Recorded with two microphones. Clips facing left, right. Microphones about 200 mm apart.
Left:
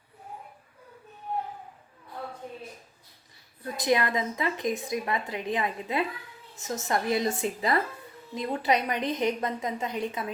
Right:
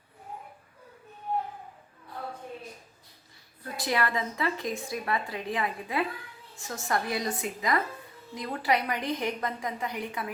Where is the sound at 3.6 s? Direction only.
20° left (ahead or behind).